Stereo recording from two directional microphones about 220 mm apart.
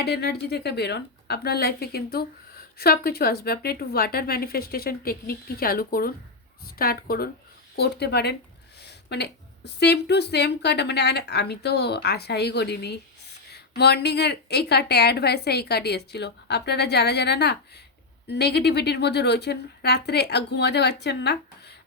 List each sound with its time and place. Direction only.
0.0 s a woman's voice: 45° left (ahead or behind)